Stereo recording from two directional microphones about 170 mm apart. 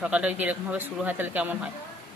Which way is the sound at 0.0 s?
5° right (ahead or behind).